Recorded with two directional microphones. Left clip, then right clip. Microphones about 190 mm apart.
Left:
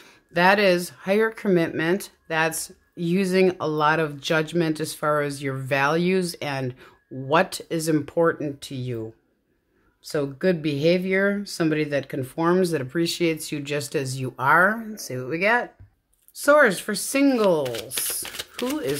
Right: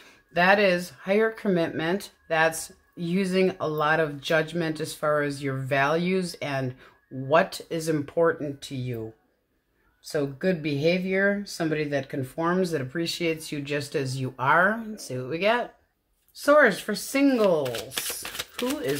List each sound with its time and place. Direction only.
0.0 s speech: 30° left (ahead or behind)
10.0 s speech: 35° left (ahead or behind)
17.6 s speech: 20° left (ahead or behind)